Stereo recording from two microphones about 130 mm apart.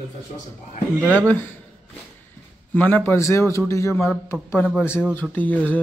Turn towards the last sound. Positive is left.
turn(degrees=10)  # may be behind; listen again after turning